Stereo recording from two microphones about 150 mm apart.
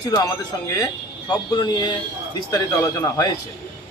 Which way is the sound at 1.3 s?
30° left (ahead or behind).